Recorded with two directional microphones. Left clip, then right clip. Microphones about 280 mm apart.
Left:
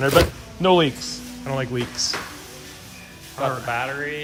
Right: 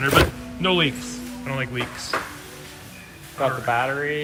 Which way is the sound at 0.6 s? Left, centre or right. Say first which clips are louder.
Left 4 dB; centre.